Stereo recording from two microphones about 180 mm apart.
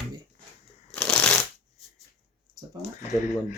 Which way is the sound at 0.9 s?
5° left (ahead or behind).